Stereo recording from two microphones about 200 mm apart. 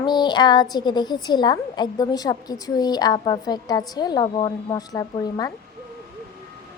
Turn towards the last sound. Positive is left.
turn(degrees=20)  # may be behind; listen again after turning